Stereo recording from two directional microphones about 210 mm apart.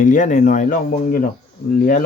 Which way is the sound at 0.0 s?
35° left (ahead or behind).